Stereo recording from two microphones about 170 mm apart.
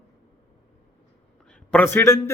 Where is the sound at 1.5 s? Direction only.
5° left (ahead or behind).